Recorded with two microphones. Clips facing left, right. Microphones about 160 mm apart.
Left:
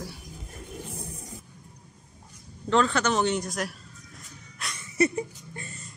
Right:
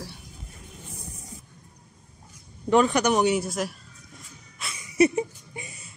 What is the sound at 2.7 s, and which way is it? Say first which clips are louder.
Music: right 3 dB; 15° right (ahead or behind).